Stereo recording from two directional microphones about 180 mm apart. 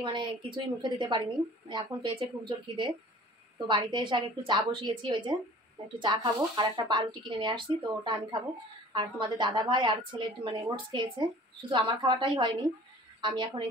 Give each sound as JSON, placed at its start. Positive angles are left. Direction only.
{"t": 0.0, "sound": "speech", "side_deg": -25}